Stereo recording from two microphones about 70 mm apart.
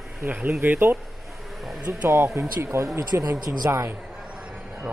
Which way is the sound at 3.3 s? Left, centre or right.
Right.